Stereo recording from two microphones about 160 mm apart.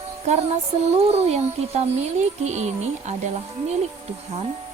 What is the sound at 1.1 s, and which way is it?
A woman's voice, 40° right (ahead or behind).